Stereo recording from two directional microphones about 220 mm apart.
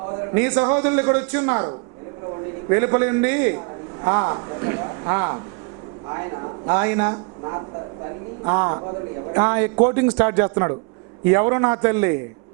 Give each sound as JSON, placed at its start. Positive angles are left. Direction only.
{"t": 0.3, "sound": "a man's voice", "side_deg": -10}
{"t": 6.7, "sound": "a man's voice", "side_deg": -15}
{"t": 8.4, "sound": "a man's voice", "side_deg": -20}